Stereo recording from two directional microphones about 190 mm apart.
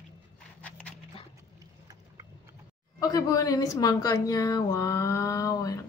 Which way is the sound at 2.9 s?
20° left (ahead or behind).